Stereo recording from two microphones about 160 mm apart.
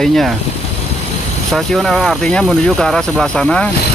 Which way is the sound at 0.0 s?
Centre (ahead or behind).